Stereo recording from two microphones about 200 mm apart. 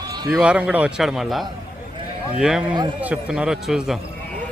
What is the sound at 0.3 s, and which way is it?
A man's voice, 5° right (ahead or behind).